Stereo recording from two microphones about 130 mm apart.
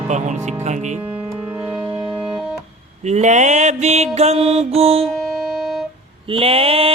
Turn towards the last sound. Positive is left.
turn(degrees=-45)  # may be behind; listen again after turning